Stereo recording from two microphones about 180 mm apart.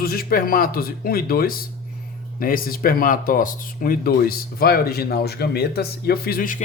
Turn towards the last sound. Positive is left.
turn(degrees=50)  # may be behind; listen again after turning